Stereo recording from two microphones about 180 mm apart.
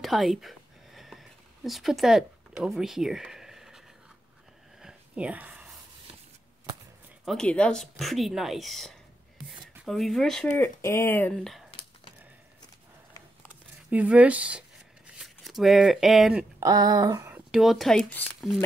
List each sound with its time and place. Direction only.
0.0 s a sound: centre (ahead or behind)
4.8 s whispering: 5° right (ahead or behind)
7.2 s speech: 5° left (ahead or behind)
13.5 s a sound: 10° right (ahead or behind)
15.0 s speech: centre (ahead or behind)
16.6 s speech: 20° right (ahead or behind)
17.5 s speech: centre (ahead or behind)